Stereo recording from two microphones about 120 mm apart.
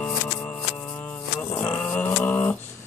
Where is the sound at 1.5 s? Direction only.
15° left (ahead or behind).